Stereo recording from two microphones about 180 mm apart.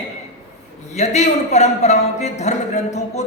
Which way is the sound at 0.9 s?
40° left (ahead or behind).